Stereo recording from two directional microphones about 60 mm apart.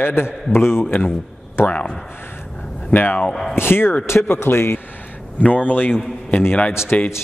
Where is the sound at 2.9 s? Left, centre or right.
Left.